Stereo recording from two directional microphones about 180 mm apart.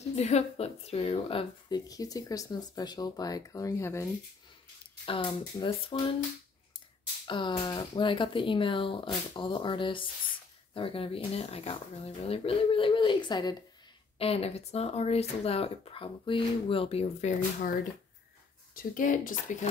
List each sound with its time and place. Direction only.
0.1 s speech: 35° left (ahead or behind); by 4.1 s 15° left (ahead or behind)
5.0 s speech: 30° left (ahead or behind)
7.2 s speech: 25° left (ahead or behind)
18.8 s speech: 50° left (ahead or behind)